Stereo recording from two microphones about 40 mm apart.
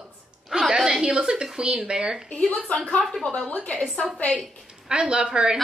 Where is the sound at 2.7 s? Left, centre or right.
Left.